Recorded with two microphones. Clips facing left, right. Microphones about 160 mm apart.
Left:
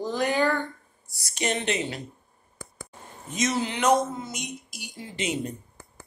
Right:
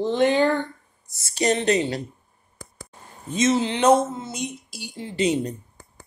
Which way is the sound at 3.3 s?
25° right (ahead or behind).